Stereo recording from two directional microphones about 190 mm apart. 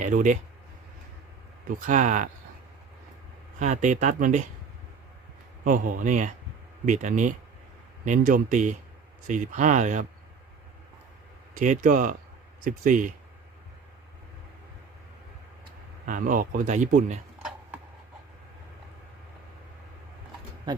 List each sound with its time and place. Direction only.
0.0 s speech: 40° right (ahead or behind)
1.6 s speech: 40° right (ahead or behind)
3.6 s speech: 40° right (ahead or behind)
5.6 s speech: 45° right (ahead or behind)
11.5 s speech: 40° right (ahead or behind)
16.0 s speech: 45° right (ahead or behind)
20.7 s speech: 20° right (ahead or behind)